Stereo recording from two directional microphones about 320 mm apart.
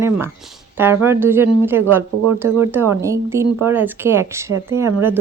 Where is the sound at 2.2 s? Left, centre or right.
Right.